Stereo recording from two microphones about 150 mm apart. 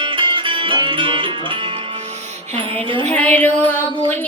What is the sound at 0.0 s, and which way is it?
Speech, 35° right (ahead or behind).